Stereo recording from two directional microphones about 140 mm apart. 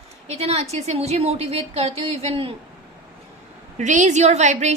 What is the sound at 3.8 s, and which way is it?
Speech, 60° right (ahead or behind).